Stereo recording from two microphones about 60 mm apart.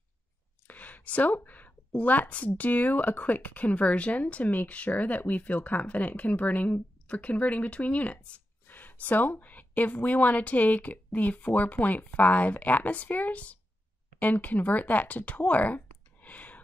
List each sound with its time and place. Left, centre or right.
0.7 s speech: left